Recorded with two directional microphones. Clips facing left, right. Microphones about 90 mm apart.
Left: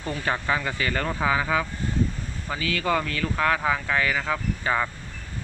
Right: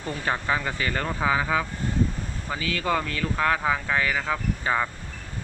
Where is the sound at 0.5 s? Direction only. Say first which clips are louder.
Even; 20° right (ahead or behind).